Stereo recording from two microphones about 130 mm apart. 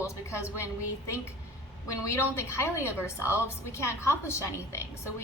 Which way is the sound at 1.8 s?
25° left (ahead or behind).